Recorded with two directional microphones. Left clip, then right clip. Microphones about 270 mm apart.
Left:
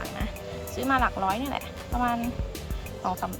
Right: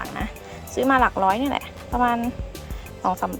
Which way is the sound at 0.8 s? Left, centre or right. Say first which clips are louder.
Right 6 dB; right.